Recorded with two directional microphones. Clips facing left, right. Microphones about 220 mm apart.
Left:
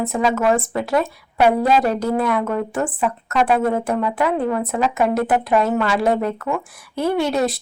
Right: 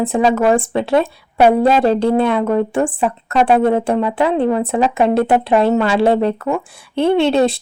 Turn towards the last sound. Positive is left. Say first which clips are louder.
# right 6 dB
turn(degrees=-25)  # may be behind; listen again after turning